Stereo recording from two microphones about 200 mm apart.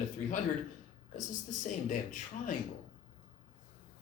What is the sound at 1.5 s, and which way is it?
Speech, 40° left (ahead or behind).